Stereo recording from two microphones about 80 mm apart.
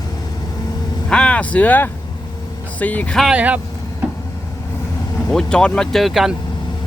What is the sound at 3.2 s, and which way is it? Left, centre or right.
Speech, centre.